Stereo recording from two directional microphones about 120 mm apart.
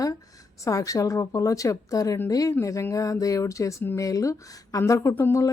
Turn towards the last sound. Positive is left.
turn(degrees=20)  # may be behind; listen again after turning